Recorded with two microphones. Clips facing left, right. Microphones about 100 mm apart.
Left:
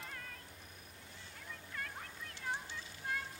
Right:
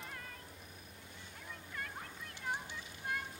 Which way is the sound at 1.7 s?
5° right (ahead or behind).